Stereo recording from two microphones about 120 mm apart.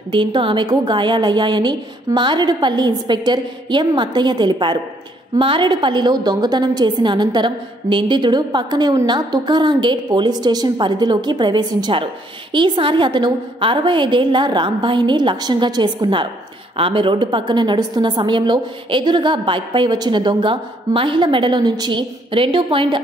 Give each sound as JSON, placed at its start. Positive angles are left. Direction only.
{"t": 0.1, "sound": "a woman's voice", "side_deg": -45}